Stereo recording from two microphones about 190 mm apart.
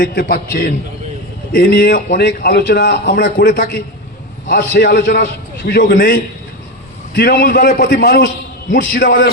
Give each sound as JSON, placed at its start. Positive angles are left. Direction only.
{"t": 0.0, "sound": "a man's voice", "side_deg": 55}
{"t": 4.7, "sound": "a man's voice", "side_deg": 60}
{"t": 8.7, "sound": "a man's voice", "side_deg": 45}